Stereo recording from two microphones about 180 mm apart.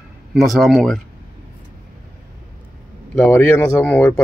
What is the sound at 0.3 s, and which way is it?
Speech, centre (ahead or behind).